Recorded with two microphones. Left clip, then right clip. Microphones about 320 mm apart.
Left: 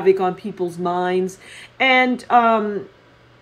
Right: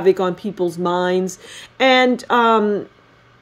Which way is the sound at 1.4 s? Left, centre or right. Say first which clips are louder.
Right 2 dB; right.